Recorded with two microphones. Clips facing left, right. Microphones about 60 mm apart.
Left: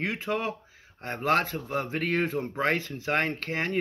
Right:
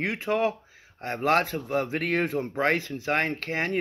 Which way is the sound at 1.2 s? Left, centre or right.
Right.